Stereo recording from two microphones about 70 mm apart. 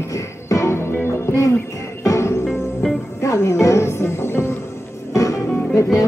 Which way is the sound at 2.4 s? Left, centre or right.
Centre.